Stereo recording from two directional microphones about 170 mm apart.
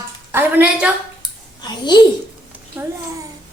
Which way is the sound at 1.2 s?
25° left (ahead or behind).